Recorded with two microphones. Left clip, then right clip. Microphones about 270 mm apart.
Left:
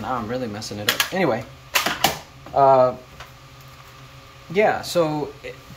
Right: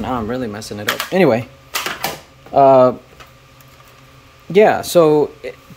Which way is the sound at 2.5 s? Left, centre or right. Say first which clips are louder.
Right 5 dB; right.